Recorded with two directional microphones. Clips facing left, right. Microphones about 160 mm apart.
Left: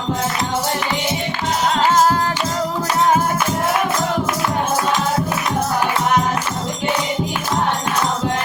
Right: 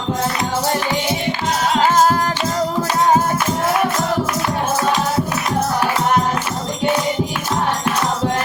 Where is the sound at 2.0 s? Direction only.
30° right (ahead or behind).